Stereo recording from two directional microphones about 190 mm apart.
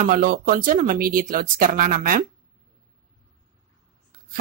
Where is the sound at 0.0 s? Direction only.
50° right (ahead or behind).